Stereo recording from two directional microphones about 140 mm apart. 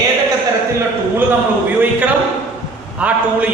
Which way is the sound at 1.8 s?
10° right (ahead or behind).